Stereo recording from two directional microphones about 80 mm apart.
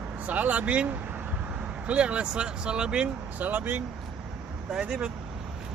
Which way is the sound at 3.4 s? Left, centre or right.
Right.